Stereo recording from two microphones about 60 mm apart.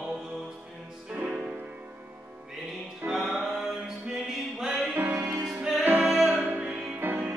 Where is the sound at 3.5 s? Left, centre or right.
Centre.